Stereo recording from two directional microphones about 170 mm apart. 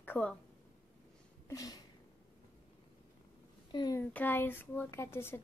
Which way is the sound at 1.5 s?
20° left (ahead or behind).